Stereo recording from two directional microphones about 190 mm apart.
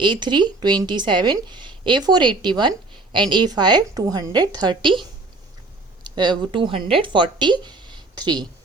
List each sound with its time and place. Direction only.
0.0 s a woman's voice: 25° right (ahead or behind)
6.0 s speech: 25° right (ahead or behind)